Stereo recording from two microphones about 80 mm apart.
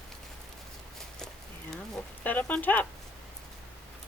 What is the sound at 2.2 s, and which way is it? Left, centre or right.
Speech, left.